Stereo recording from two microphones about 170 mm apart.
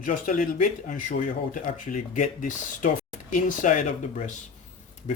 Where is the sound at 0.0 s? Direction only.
50° left (ahead or behind).